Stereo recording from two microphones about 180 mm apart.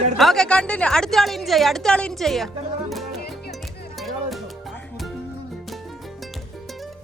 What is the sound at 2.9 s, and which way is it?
Music, centre (ahead or behind).